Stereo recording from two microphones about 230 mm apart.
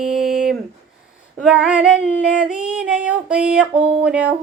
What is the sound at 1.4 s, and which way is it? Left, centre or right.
Female singing, centre.